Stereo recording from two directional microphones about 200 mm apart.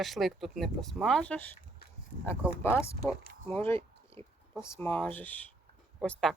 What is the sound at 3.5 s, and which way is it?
Speech, 10° left (ahead or behind).